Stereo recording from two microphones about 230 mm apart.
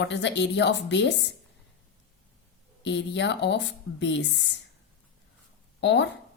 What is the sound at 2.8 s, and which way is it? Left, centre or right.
A woman's voice, left.